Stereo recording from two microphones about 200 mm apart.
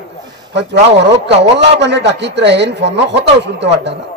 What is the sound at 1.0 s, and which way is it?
A man's voice, 60° right (ahead or behind).